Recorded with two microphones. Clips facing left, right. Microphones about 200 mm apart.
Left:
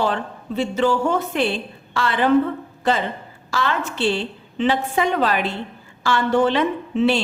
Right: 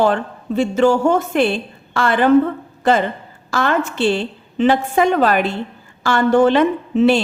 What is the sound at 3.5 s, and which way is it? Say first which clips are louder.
A woman's voice: right 5 dB; 50° right (ahead or behind).